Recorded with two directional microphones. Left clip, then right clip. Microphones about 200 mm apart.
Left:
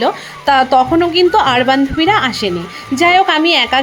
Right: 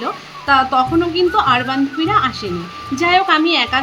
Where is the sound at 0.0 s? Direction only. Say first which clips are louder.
Left 8 dB; 30° left (ahead or behind).